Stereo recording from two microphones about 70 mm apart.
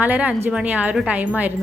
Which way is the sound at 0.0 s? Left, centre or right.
Right.